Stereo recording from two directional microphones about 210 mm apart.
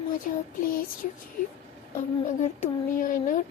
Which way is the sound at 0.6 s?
40° left (ahead or behind).